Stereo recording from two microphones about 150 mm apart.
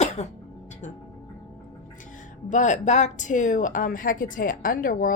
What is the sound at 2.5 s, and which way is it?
Speech, 55° left (ahead or behind).